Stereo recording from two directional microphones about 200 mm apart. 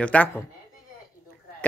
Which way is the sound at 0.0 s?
5° left (ahead or behind).